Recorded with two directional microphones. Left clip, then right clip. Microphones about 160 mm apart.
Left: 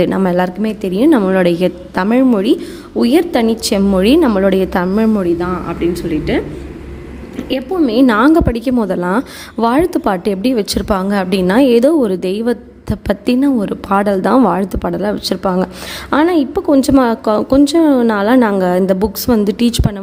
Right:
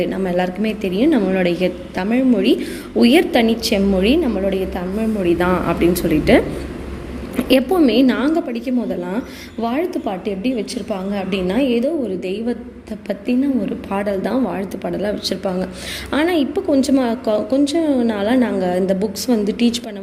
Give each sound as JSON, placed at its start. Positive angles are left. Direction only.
{"t": 0.0, "sound": "a woman's voice", "side_deg": 50}
{"t": 2.6, "sound": "a woman's voice", "side_deg": 30}
{"t": 5.4, "sound": "speech", "side_deg": -5}
{"t": 7.3, "sound": "a sound", "side_deg": -15}
{"t": 7.9, "sound": "a woman's voice", "side_deg": 40}